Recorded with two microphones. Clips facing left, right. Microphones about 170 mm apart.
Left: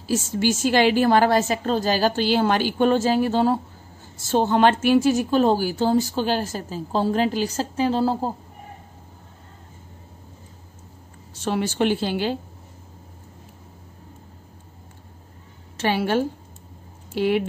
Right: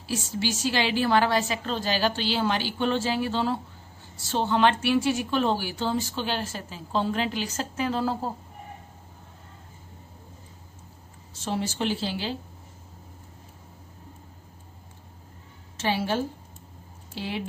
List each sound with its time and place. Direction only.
0.1 s a woman's voice: 50° left (ahead or behind); by 8.3 s 30° left (ahead or behind)
11.3 s a woman's voice: 60° left (ahead or behind)
15.8 s a woman's voice: 65° left (ahead or behind)